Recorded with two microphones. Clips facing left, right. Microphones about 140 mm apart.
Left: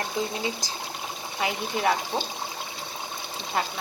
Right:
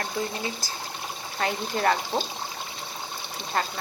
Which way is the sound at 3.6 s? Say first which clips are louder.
Even; 10° left (ahead or behind).